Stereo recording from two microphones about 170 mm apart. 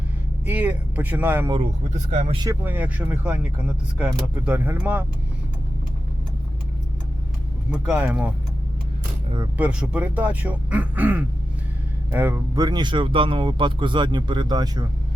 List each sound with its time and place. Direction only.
0.4 s speech: 10° right (ahead or behind)
1.9 s speech: 45° right (ahead or behind)
2.5 s speech: 10° right (ahead or behind)
7.7 s speech: 10° right (ahead or behind)
9.6 s speech: 5° right (ahead or behind); by 14.8 s 25° right (ahead or behind)